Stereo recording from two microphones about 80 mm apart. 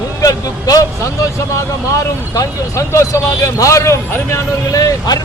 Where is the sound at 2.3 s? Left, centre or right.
Left.